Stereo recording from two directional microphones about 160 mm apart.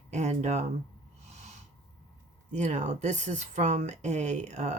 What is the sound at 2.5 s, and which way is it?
Speech, 45° right (ahead or behind).